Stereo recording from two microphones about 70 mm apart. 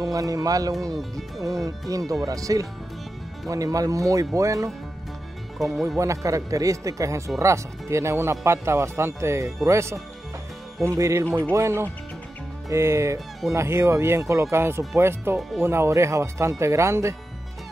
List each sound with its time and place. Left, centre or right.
0.0 s speech: right
5.6 s speech: centre
5.9 s speech: right